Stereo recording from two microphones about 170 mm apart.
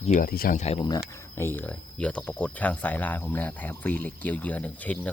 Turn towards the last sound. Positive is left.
turn(degrees=10)  # may be behind; listen again after turning